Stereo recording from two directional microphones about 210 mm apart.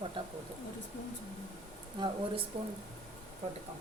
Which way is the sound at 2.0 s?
20° right (ahead or behind).